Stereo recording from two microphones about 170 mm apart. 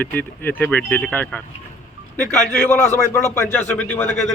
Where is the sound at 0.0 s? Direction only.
10° left (ahead or behind).